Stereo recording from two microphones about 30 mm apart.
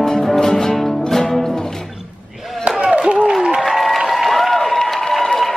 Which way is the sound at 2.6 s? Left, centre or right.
Right.